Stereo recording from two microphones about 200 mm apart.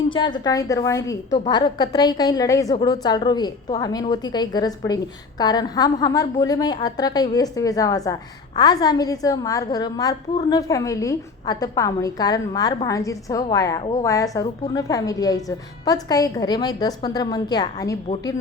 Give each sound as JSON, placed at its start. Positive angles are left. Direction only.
{"t": 0.1, "sound": "a woman's voice", "side_deg": 20}